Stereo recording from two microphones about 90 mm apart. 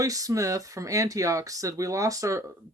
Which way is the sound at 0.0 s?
40° right (ahead or behind).